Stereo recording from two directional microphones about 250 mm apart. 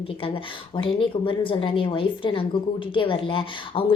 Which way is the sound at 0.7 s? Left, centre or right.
Centre.